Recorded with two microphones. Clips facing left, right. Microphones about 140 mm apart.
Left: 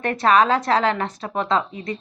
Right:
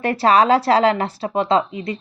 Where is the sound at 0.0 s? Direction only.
30° right (ahead or behind).